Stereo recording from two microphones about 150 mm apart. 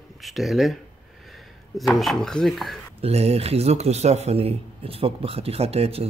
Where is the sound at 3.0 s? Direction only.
45° right (ahead or behind).